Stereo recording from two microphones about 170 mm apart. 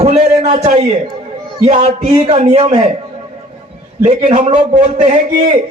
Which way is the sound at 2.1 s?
35° right (ahead or behind).